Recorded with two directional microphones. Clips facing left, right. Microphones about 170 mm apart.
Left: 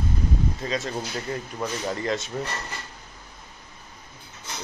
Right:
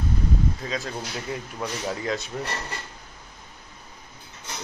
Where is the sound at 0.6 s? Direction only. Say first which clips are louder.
Left 2 dB; centre (ahead or behind).